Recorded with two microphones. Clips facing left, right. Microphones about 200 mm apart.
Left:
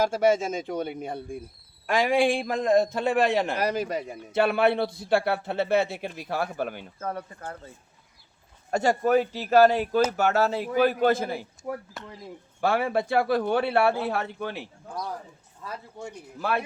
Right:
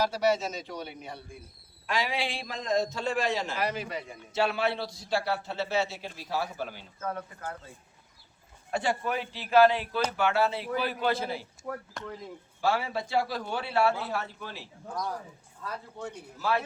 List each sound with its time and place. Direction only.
0.0 s a man's voice: 50° left (ahead or behind)
3.6 s a man's voice: 40° left (ahead or behind)
8.7 s a man's voice: 45° left (ahead or behind)
11.6 s speech: 15° left (ahead or behind)
12.5 s a man's voice: 55° left (ahead or behind)
16.4 s a man's voice: 55° left (ahead or behind)